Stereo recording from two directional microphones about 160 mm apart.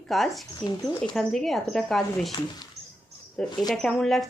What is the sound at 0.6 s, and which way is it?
Speech, 25° left (ahead or behind).